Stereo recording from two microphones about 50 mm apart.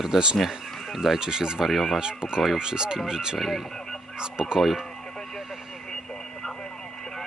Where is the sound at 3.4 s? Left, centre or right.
Centre.